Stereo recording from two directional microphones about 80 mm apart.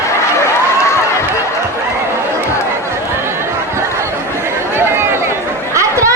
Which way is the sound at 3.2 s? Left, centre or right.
Right.